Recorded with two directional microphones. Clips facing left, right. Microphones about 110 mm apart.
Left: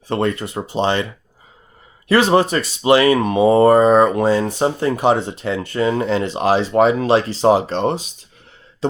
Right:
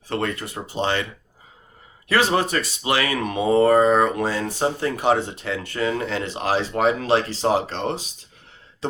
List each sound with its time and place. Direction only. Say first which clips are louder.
0.1 s speech: left 6 dB; 25° left (ahead or behind)
2.0 s speech: left 6 dB; 25° left (ahead or behind)
3.5 s a sound: left 3 dB; 35° left (ahead or behind)
3.8 s speech: left 5 dB; 25° left (ahead or behind)